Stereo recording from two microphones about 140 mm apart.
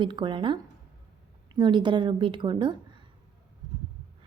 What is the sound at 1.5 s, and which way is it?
A woman's voice, 35° right (ahead or behind).